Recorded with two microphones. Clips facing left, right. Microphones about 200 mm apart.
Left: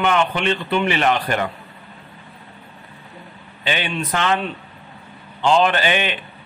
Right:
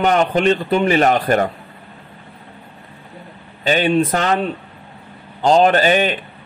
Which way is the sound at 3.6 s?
40° right (ahead or behind).